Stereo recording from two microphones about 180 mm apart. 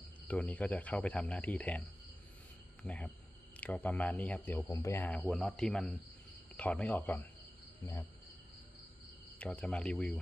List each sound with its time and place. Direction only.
0.3 s speech: 10° left (ahead or behind)
2.8 s speech: 5° left (ahead or behind)
9.4 s speech: 10° left (ahead or behind)